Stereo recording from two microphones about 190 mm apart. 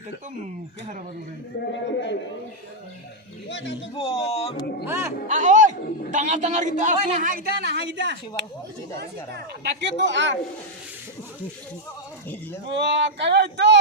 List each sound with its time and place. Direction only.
1.6 s a man's voice: 70° left (ahead or behind)
3.5 s a man's voice: 75° left (ahead or behind)
3.9 s speech: 30° left (ahead or behind)
4.9 s speech: 15° right (ahead or behind)
5.3 s a man's voice: 40° right (ahead or behind); by 8.1 s 65° right (ahead or behind)
9.8 s speech: 70° right (ahead or behind)
12.7 s speech: 65° right (ahead or behind)